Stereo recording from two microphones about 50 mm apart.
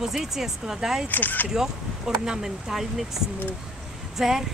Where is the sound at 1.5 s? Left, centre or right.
Centre.